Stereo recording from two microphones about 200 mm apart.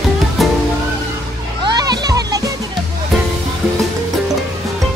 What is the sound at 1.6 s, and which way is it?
Music, 20° right (ahead or behind).